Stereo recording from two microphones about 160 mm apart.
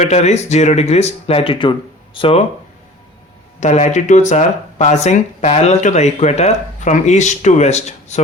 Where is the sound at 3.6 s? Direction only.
45° left (ahead or behind).